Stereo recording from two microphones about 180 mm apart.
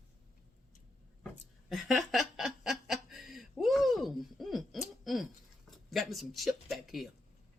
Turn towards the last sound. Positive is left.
turn(degrees=0)  # may be behind; listen again after turning